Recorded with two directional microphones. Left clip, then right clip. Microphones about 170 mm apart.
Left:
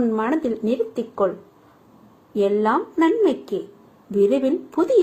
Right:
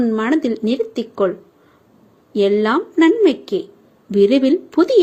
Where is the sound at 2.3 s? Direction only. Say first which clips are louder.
Right 4 dB; 45° right (ahead or behind).